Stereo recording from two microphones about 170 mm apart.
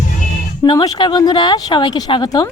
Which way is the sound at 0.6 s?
30° left (ahead or behind).